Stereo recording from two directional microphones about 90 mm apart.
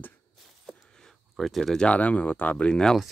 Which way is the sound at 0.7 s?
Centre (ahead or behind).